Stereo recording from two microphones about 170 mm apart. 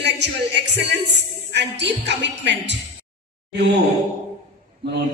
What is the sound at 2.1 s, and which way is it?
Speech, 90° right.